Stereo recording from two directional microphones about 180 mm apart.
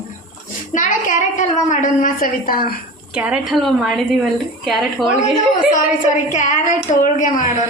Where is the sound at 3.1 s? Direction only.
5° right (ahead or behind).